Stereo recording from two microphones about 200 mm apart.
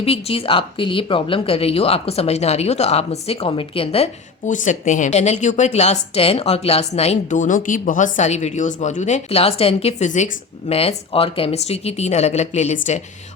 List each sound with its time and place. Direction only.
0.0 s speech: 30° left (ahead or behind)